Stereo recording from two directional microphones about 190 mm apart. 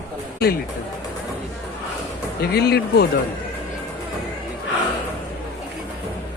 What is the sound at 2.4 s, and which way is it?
Speech, 55° left (ahead or behind).